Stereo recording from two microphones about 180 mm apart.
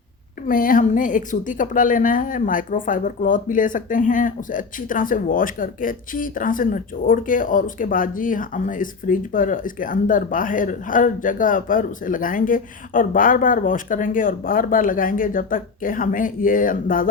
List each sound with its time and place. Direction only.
0.4 s a woman's voice: 50° left (ahead or behind)